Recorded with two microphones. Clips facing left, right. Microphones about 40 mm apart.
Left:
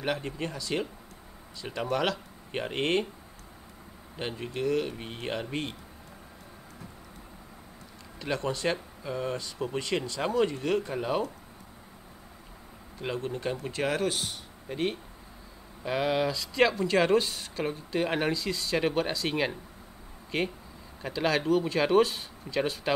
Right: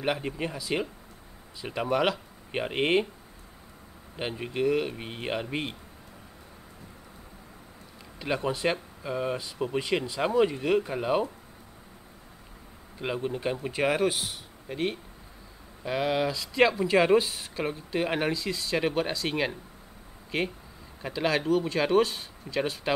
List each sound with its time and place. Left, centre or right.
0.0 s speech: centre
4.2 s speech: centre
8.2 s speech: centre
13.0 s speech: centre